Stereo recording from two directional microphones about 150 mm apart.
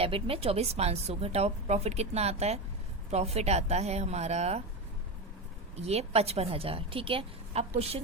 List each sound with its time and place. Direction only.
0.0 s a woman's voice: 40° right (ahead or behind)
5.7 s a woman's voice: 45° right (ahead or behind)